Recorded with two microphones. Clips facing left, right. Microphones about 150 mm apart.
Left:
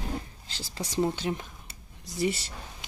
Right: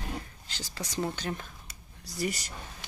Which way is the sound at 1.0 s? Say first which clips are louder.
Left 5 dB; 20° left (ahead or behind).